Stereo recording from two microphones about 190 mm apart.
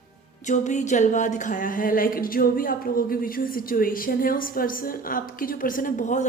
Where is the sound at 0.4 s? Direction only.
40° left (ahead or behind).